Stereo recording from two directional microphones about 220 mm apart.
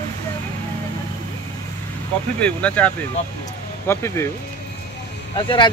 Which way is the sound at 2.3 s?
5° left (ahead or behind).